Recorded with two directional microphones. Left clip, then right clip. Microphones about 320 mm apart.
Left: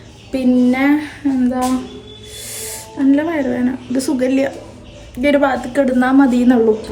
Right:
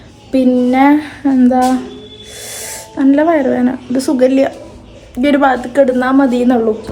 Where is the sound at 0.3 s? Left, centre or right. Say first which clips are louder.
Right 3 dB; centre.